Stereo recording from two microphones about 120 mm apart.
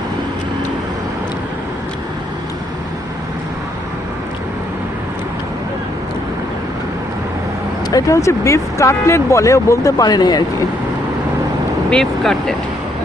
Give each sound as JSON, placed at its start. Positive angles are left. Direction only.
{"t": 7.9, "sound": "speech", "side_deg": 30}
{"t": 11.9, "sound": "speech", "side_deg": 5}